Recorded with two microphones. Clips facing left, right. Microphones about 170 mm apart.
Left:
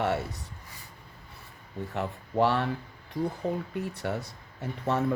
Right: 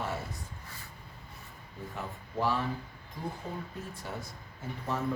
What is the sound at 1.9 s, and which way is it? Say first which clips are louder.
Speech: left 8 dB; 70° left (ahead or behind).